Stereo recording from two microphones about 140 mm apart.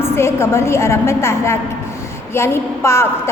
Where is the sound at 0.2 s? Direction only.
20° left (ahead or behind).